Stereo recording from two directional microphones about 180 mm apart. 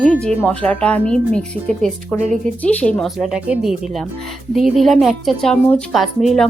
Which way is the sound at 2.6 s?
5° left (ahead or behind).